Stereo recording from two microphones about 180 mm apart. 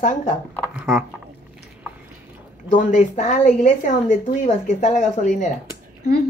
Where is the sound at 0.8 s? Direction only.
5° right (ahead or behind).